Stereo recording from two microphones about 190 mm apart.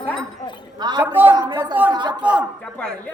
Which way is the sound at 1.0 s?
10° right (ahead or behind).